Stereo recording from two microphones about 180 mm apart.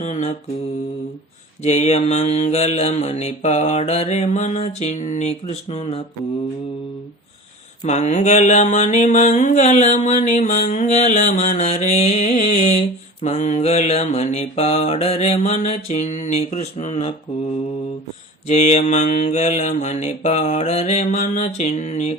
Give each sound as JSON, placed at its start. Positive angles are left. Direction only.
{"t": 0.0, "sound": "mantra", "side_deg": 40}
{"t": 1.6, "sound": "mantra", "side_deg": 40}
{"t": 7.9, "sound": "mantra", "side_deg": 40}
{"t": 18.4, "sound": "mantra", "side_deg": 40}